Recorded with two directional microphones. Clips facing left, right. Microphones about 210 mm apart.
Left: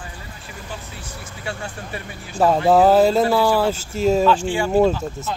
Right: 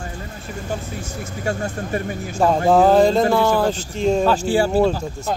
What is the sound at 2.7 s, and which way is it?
Speech, 5° left (ahead or behind).